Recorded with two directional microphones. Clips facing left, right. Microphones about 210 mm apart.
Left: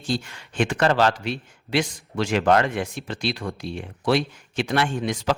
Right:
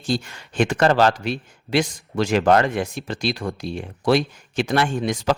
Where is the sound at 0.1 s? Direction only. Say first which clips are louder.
Right 3 dB; 40° right (ahead or behind).